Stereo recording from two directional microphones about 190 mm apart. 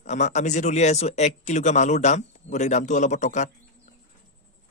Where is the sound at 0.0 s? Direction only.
40° left (ahead or behind).